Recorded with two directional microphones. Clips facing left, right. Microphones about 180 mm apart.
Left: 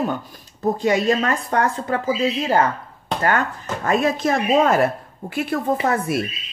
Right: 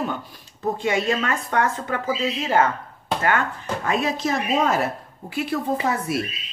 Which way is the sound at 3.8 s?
45° left (ahead or behind).